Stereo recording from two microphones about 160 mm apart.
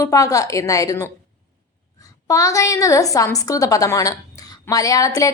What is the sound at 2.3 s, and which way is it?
Speech, 20° left (ahead or behind).